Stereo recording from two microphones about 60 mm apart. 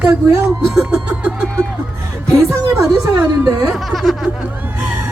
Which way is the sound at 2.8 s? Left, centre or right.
Right.